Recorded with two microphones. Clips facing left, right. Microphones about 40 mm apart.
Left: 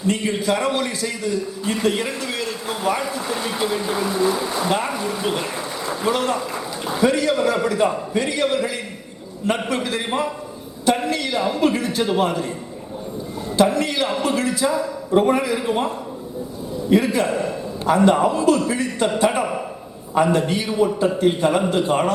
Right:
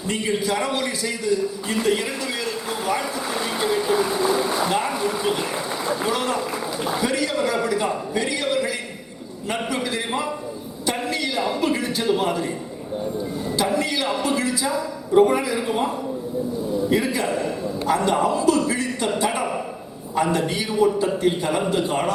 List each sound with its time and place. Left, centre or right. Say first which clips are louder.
0.1 s a man's voice: left 2 dB; centre
14.0 s a man's voice: left 2 dB; centre
16.9 s a man's voice: left 7 dB; centre